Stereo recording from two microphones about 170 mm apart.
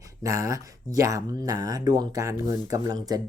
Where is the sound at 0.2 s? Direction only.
20° right (ahead or behind).